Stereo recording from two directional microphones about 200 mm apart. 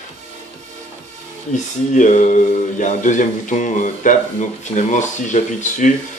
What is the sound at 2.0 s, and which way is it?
Speech, 40° left (ahead or behind).